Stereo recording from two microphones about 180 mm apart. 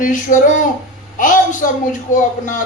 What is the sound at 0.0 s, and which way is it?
Speech, 45° left (ahead or behind).